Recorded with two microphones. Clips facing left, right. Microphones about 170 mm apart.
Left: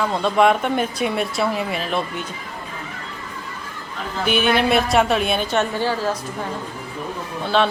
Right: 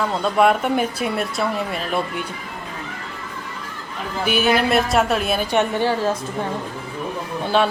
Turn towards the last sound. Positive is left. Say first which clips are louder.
# even
turn(degrees=-10)  # may be behind; listen again after turning